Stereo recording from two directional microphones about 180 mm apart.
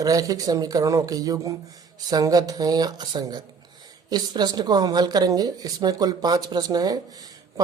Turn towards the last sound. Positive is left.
turn(degrees=-20)  # may be behind; listen again after turning